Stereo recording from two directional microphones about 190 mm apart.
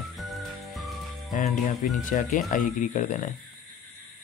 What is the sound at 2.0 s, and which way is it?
Speech, 45° left (ahead or behind).